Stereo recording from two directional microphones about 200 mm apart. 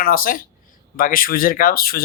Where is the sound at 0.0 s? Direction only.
45° left (ahead or behind).